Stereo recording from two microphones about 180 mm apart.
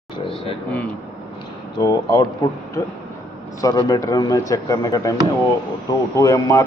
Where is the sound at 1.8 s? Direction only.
20° left (ahead or behind).